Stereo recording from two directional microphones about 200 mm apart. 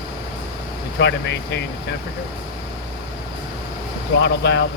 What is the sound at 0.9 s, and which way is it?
Speech, 60° left (ahead or behind).